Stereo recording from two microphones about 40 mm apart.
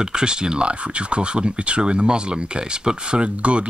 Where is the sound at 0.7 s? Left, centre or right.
Right.